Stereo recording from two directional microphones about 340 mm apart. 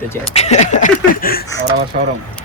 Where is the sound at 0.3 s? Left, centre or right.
Centre.